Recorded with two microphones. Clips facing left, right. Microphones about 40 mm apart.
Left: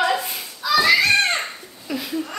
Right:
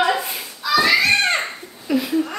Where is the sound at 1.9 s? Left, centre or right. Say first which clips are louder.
Right 7 dB; centre.